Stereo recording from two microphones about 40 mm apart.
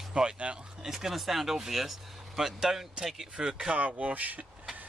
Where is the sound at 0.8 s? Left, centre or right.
Centre.